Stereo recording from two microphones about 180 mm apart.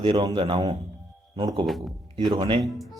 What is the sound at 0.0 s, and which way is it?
Speech, 25° right (ahead or behind).